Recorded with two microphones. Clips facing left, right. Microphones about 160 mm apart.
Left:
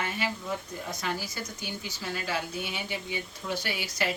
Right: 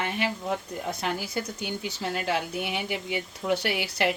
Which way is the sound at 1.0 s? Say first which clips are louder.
Right 3 dB; 60° right (ahead or behind).